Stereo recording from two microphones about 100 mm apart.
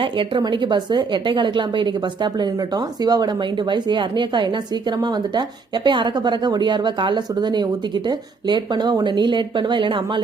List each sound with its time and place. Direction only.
0.0 s speech: 55° right (ahead or behind)